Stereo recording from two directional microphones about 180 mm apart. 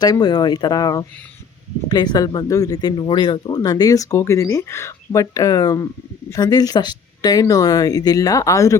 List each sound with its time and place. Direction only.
0.0 s speech: 20° left (ahead or behind)